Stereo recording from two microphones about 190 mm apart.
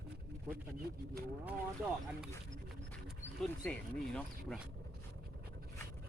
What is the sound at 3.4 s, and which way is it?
Speech, 5° left (ahead or behind).